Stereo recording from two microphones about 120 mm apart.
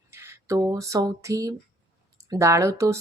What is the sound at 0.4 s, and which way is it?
Speech, 30° right (ahead or behind).